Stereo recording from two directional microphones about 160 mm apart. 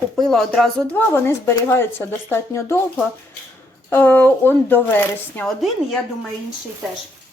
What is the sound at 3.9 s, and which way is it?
Speech, 10° left (ahead or behind).